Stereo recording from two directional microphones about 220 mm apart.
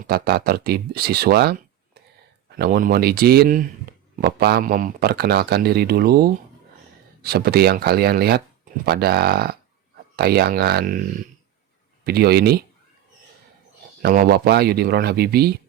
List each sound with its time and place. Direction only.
0.0 s speech: 45° right (ahead or behind)
2.6 s speech: 45° right (ahead or behind)
14.0 s speech: 45° right (ahead or behind)